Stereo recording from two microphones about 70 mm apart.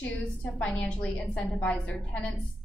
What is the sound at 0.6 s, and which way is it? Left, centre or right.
A woman's voice, centre.